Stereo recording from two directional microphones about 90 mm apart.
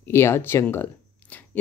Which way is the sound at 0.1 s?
25° left (ahead or behind).